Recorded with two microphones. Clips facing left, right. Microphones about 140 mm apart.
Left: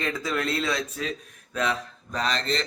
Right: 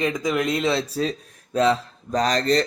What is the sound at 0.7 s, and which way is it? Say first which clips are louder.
Speech: right 6 dB; 30° right (ahead or behind).